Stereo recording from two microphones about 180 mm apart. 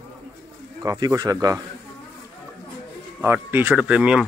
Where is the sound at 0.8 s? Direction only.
20° right (ahead or behind).